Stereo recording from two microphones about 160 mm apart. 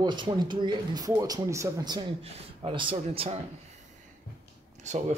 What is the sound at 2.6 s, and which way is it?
Speech, 35° right (ahead or behind).